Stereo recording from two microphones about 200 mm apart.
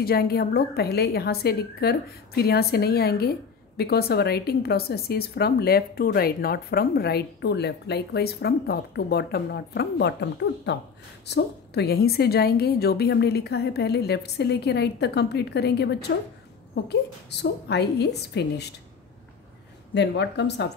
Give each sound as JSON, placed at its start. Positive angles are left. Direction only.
{"t": 0.0, "sound": "a woman's voice", "side_deg": 50}
{"t": 19.9, "sound": "a woman's voice", "side_deg": 60}